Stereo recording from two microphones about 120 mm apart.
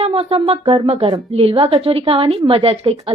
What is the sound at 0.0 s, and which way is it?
Speech, 55° right (ahead or behind).